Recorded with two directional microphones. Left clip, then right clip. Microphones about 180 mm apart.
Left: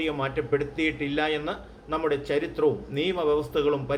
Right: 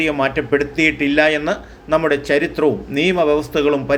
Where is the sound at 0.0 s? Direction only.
40° right (ahead or behind).